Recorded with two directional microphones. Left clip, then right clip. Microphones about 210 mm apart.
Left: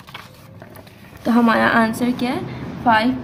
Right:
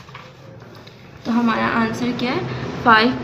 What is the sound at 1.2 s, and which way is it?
A woman's voice, 40° left (ahead or behind).